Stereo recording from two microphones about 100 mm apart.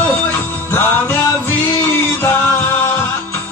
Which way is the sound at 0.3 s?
20° left (ahead or behind).